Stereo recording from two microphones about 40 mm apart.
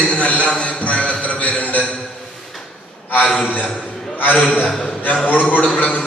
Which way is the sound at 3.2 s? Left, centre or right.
Left.